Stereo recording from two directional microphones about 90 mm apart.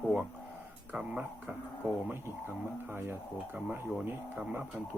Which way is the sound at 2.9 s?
25° right (ahead or behind).